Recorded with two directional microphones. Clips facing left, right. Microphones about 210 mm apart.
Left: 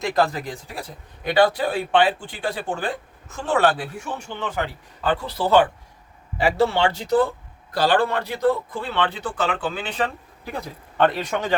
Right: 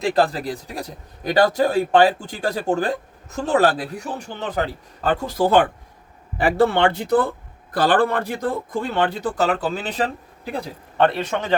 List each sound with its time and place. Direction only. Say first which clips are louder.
0.0 s a man's voice: right 2 dB; 30° right (ahead or behind)
11.0 s speech: right 1 dB; 25° right (ahead or behind)